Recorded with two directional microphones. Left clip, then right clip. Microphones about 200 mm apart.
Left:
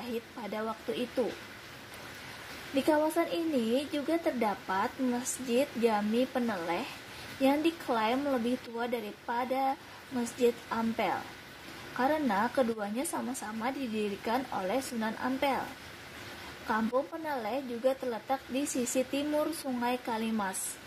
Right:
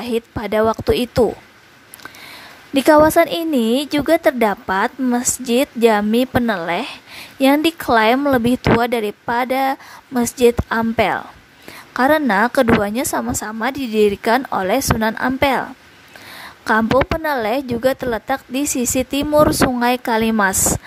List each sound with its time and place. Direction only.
0.0 s a woman's voice: 40° right (ahead or behind)
2.7 s a woman's voice: 40° right (ahead or behind)
17.3 s a woman's voice: 40° right (ahead or behind)